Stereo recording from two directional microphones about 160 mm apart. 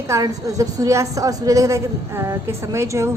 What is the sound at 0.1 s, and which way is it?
A woman's voice, 20° right (ahead or behind).